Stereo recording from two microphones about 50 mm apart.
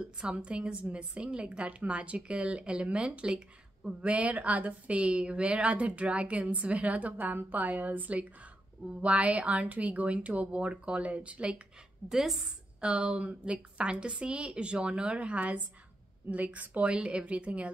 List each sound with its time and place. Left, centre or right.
0.0 s speech: right
4.0 s speech: right
12.1 s a woman's voice: centre
12.4 s speech: centre